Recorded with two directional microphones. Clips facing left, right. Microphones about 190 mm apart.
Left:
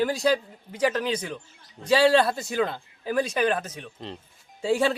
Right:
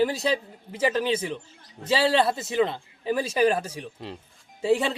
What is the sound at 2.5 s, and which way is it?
Speech, centre (ahead or behind).